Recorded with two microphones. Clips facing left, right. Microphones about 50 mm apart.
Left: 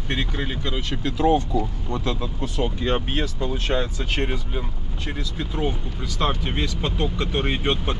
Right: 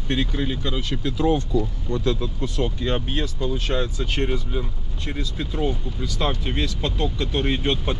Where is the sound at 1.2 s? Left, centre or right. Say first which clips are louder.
Left 2 dB; left.